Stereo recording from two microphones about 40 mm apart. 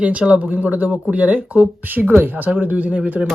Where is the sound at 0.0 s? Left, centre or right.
Right.